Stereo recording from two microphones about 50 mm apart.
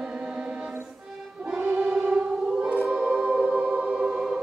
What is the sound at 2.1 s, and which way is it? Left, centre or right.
Choir, centre.